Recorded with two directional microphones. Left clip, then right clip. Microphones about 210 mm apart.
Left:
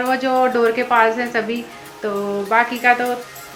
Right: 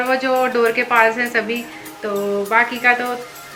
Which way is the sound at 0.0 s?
20° left (ahead or behind).